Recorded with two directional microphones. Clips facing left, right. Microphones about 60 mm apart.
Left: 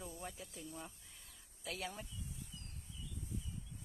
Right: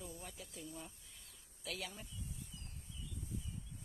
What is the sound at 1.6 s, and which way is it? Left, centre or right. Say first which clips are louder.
Speech: left 1 dB; left.